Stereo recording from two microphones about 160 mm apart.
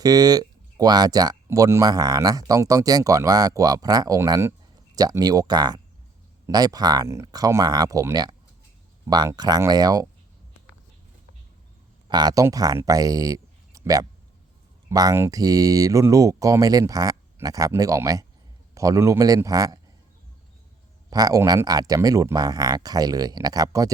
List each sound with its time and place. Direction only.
0.0 s speech: 25° right (ahead or behind)
12.0 s speech: 25° right (ahead or behind)
21.1 s speech: 25° right (ahead or behind)